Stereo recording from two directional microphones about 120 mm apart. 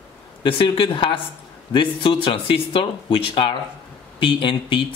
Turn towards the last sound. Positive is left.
turn(degrees=45)  # may be behind; listen again after turning